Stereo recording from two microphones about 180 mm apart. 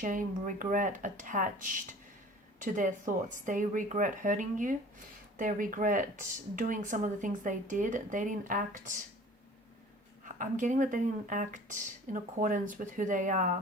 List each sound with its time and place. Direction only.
0.0 s speech: 45° right (ahead or behind)
10.3 s speech: 45° right (ahead or behind)